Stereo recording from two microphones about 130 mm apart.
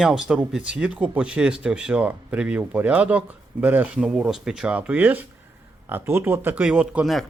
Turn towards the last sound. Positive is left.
turn(degrees=-5)  # may be behind; listen again after turning